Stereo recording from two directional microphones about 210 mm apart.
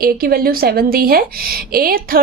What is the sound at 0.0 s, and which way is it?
A woman's voice, 45° right (ahead or behind).